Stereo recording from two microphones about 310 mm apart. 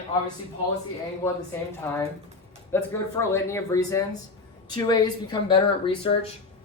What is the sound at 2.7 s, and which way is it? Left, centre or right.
Speech, centre.